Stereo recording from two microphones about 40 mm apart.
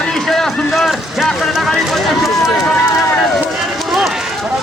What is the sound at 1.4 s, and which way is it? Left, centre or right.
Run, centre.